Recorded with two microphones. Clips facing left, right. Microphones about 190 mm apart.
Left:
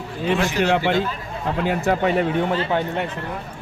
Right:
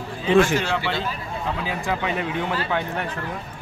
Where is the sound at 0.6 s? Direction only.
45° left (ahead or behind).